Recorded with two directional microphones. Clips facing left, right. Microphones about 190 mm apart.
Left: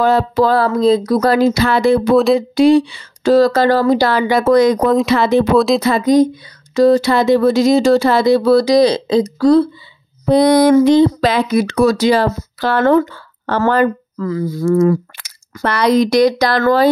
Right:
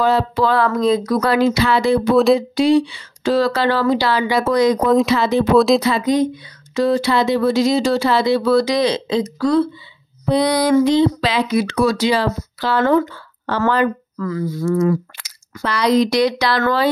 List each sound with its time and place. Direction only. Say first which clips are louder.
0.0 s speech: left 3 dB; 45° left (ahead or behind)
10.2 s speech: left 6 dB; 45° left (ahead or behind)
14.1 s speech: left 3 dB; 30° left (ahead or behind)
14.6 s speech: left 5 dB; 45° left (ahead or behind)